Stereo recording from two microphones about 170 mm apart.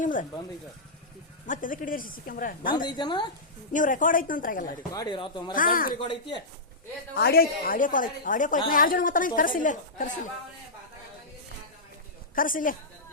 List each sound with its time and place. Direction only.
0.0 s a woman's voice: 50° left (ahead or behind)
1.5 s a woman's voice: 50° left (ahead or behind)
2.7 s a woman's voice: 25° left (ahead or behind)
3.7 s a woman's voice: 50° left (ahead or behind)
4.9 s a woman's voice: 25° left (ahead or behind)
5.5 s a woman's voice: 55° left (ahead or behind)
6.0 s a woman's voice: 30° left (ahead or behind)
7.2 s a woman's voice: 65° left (ahead or behind)
12.3 s a woman's voice: 55° left (ahead or behind)